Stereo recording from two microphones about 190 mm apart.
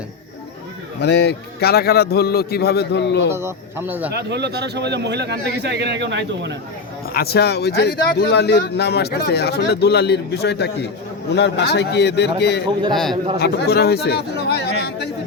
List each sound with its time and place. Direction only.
1.0 s speech: 60° left (ahead or behind)
3.3 s speech: 10° right (ahead or behind)
4.1 s a man's voice: 60° right (ahead or behind)
7.1 s speech: 55° left (ahead or behind)
12.9 s a man's voice: centre (ahead or behind)
13.4 s speech: 55° left (ahead or behind)